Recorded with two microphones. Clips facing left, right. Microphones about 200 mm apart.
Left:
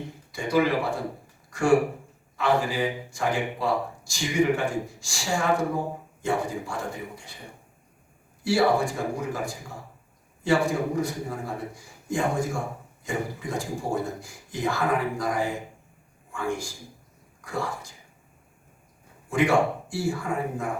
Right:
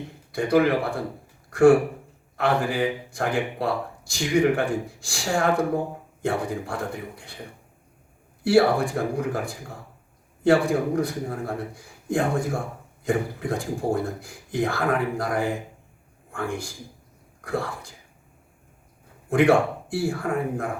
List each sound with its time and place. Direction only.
0.3 s speech: 60° right (ahead or behind)
8.4 s a man's voice: 60° right (ahead or behind)
19.3 s speech: 60° right (ahead or behind)